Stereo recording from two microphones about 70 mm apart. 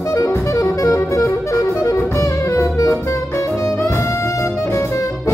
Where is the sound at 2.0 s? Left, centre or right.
Left.